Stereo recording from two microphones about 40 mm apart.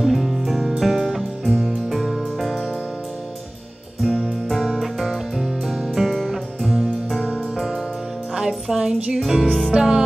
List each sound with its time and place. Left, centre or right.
0.0 s music: centre
4.0 s music: centre
9.7 s music: centre